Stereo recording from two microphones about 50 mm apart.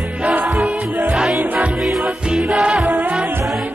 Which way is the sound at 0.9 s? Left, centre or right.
Right.